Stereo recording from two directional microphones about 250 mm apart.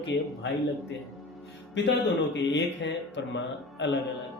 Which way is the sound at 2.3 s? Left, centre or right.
Left.